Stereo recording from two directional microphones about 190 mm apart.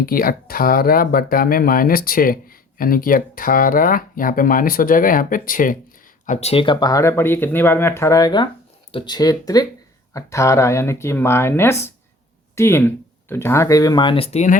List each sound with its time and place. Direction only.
0.0 s speech: 50° left (ahead or behind); by 14.5 s 35° left (ahead or behind)